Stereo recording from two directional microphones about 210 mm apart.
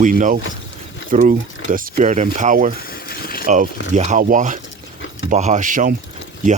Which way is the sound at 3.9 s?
35° right (ahead or behind).